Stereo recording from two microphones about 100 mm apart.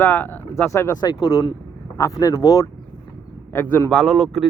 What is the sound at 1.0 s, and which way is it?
Speech, 40° left (ahead or behind).